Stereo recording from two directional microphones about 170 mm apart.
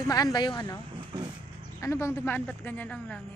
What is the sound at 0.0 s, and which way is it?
Speech, 20° left (ahead or behind).